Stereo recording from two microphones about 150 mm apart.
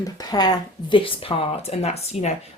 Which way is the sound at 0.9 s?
35° left (ahead or behind).